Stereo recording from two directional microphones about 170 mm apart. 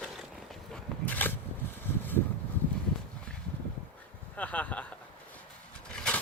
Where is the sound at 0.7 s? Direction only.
10° left (ahead or behind).